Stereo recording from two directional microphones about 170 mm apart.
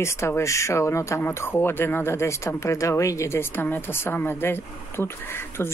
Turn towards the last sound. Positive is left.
turn(degrees=15)  # may be behind; listen again after turning